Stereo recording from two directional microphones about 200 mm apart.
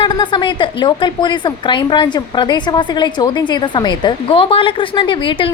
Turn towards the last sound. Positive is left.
turn(degrees=25)  # may be behind; listen again after turning